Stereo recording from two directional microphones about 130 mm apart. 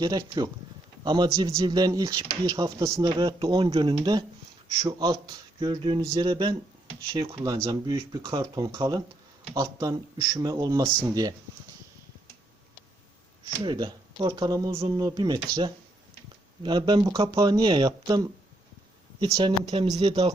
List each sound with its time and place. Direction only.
0.0 s speech: 30° right (ahead or behind)
13.6 s speech: 35° right (ahead or behind)
14.7 s speech: 45° right (ahead or behind)
14.9 s speech: 30° right (ahead or behind)
19.9 s speech: 55° right (ahead or behind)